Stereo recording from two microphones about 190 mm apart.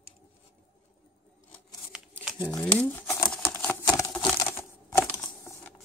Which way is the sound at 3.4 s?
10° left (ahead or behind).